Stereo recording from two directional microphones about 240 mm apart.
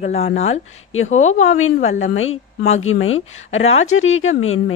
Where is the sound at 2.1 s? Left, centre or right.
Left.